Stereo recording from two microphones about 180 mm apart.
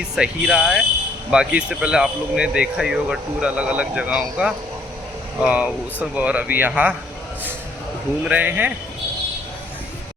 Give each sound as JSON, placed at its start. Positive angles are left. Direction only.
{"t": 0.2, "sound": "speech", "side_deg": 0}
{"t": 8.2, "sound": "speech", "side_deg": -10}